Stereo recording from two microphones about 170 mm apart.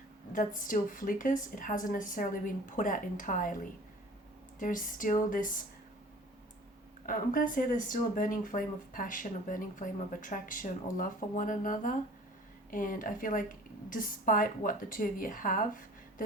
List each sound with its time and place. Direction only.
0.3 s speech: 50° left (ahead or behind)
7.0 s speech: 55° left (ahead or behind)